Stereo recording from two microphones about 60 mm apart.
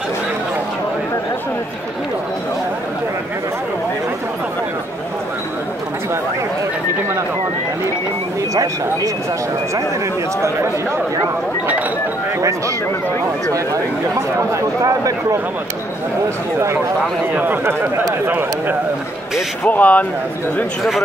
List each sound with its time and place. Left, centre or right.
12.4 s speech: right
14.5 s speech: right
16.5 s speech: right
17.3 s speech: right
19.6 s speech: left